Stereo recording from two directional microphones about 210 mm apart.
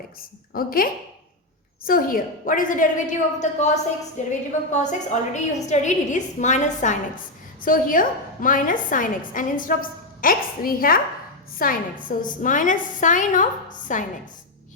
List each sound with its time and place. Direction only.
0.2 s a woman's voice: 45° left (ahead or behind)